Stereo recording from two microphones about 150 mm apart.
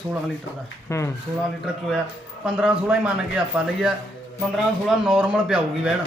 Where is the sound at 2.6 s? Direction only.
10° right (ahead or behind).